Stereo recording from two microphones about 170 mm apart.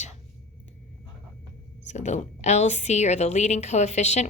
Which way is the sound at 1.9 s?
45° left (ahead or behind).